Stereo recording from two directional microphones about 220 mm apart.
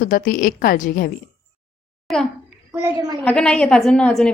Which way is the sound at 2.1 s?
Centre (ahead or behind).